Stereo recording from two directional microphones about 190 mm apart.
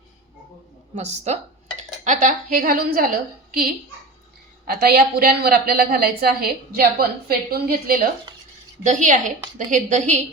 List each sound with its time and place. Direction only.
0.9 s a woman's voice: 35° right (ahead or behind)
4.6 s a woman's voice: 55° right (ahead or behind); by 10.2 s 40° right (ahead or behind)